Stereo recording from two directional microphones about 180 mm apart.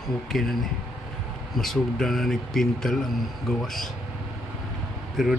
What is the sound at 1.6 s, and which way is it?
Speech, centre (ahead or behind).